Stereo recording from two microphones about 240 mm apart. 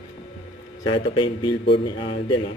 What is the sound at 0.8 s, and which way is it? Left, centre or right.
Speech, left.